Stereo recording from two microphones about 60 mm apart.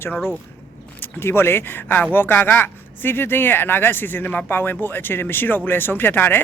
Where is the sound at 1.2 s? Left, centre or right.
Left.